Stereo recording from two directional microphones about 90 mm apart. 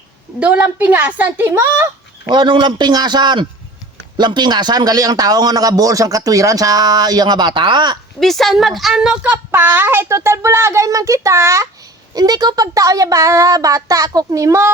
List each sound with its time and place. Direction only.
0.3 s speech: 10° right (ahead or behind)
2.3 s a man's voice: 60° right (ahead or behind)
8.2 s a woman's voice: 5° left (ahead or behind)
9.5 s speech: 20° right (ahead or behind)
12.1 s speech: 45° right (ahead or behind)